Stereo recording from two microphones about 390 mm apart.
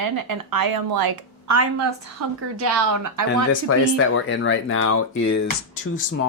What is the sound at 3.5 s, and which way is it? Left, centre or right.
Speech, left.